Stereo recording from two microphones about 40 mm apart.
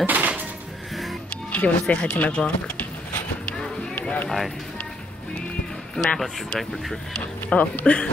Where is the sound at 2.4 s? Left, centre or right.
Left.